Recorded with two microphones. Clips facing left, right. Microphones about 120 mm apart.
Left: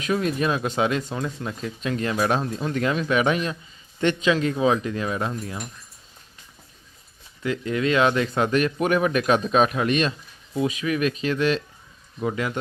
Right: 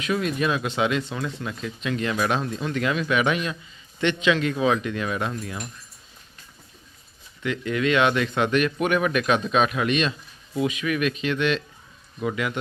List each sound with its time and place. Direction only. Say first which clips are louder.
0.0 s speech: left 1 dB; 35° left (ahead or behind)
7.4 s speech: even; 30° left (ahead or behind)